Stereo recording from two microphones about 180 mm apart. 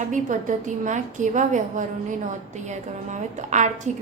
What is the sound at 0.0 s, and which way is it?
A woman's voice, 45° right (ahead or behind).